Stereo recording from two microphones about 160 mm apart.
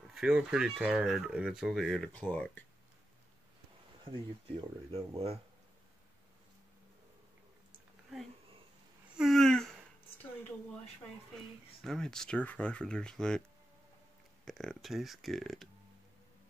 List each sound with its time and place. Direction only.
0.1 s speech: 5° right (ahead or behind)
4.0 s speech: 30° right (ahead or behind)
9.1 s a sound: centre (ahead or behind)
11.8 s speech: 5° left (ahead or behind)
14.4 s speech: centre (ahead or behind)